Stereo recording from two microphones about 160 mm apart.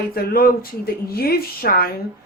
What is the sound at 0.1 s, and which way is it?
Speech, 70° left (ahead or behind).